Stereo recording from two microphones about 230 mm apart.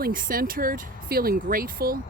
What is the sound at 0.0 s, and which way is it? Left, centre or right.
Speech, right.